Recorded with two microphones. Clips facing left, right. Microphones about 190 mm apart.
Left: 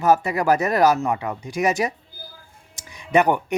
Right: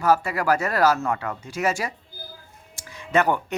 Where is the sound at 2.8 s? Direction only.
15° left (ahead or behind).